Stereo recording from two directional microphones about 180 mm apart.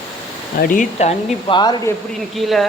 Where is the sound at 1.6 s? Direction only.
20° left (ahead or behind).